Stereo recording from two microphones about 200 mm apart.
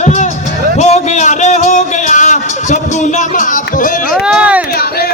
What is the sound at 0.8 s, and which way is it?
Music, 35° left (ahead or behind).